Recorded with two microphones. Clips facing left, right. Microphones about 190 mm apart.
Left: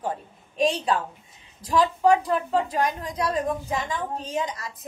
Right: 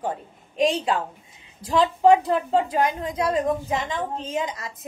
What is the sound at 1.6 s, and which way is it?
A woman's voice, 25° right (ahead or behind).